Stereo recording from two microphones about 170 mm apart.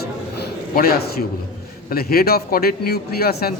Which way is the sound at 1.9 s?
65° left (ahead or behind).